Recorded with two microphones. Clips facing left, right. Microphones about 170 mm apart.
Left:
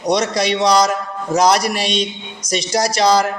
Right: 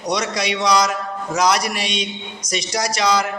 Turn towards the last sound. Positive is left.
turn(degrees=35)  # may be behind; listen again after turning